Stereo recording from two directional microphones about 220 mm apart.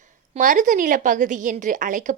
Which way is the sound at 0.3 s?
35° right (ahead or behind).